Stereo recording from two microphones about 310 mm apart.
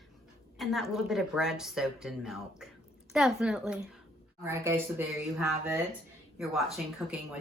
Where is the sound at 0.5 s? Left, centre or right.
Centre.